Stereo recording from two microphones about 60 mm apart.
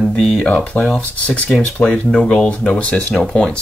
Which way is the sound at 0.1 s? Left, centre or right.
Centre.